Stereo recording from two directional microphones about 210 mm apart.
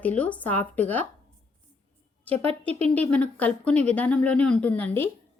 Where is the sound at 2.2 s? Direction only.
5° left (ahead or behind).